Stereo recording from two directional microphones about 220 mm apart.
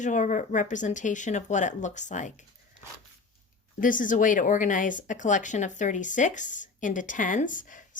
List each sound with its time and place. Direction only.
0.0 s speech: 35° left (ahead or behind)
3.8 s speech: 35° left (ahead or behind)